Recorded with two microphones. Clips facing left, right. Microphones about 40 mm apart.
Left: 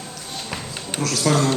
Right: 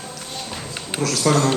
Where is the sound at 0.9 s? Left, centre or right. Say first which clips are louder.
Right 1 dB; centre.